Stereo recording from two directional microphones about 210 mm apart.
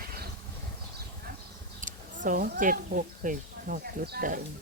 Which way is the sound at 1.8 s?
40° right (ahead or behind).